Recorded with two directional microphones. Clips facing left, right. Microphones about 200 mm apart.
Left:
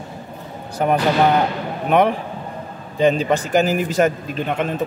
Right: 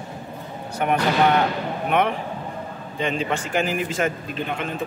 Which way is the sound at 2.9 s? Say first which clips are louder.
Left 8 dB; 40° left (ahead or behind).